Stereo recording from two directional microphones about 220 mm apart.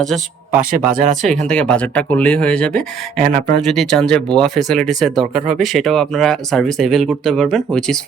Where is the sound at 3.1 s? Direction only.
35° right (ahead or behind).